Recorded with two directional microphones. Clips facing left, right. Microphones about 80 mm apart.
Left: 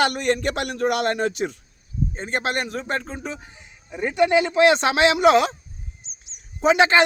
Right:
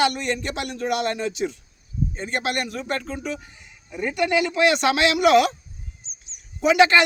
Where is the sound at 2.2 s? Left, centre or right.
Left.